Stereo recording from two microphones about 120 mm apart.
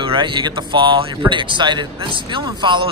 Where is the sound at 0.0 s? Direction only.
45° right (ahead or behind).